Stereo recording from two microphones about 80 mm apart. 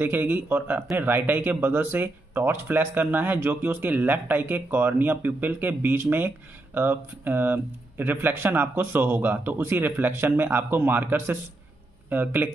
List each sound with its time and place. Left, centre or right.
0.0 s speech: right